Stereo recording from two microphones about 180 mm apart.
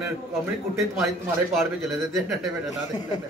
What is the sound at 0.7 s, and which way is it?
Speech, centre (ahead or behind).